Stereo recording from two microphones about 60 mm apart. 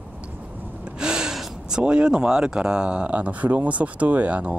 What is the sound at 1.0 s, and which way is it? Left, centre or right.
Speech, centre.